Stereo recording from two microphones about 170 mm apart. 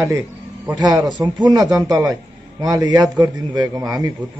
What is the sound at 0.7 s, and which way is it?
A man's voice, 25° right (ahead or behind).